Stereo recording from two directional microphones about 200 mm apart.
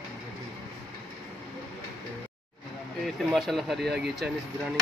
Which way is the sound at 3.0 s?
Centre (ahead or behind).